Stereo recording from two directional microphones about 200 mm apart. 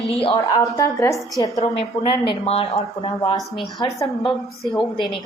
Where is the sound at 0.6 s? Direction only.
15° left (ahead or behind).